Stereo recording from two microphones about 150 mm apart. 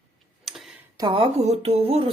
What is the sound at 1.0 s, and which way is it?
Speech, 35° right (ahead or behind).